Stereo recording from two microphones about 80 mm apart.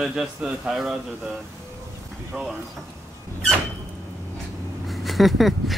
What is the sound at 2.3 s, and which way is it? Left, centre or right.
Speech, centre.